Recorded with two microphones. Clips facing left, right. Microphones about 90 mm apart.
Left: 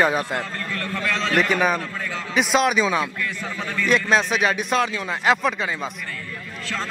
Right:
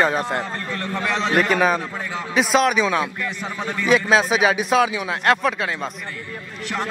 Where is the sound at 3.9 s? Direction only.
5° right (ahead or behind).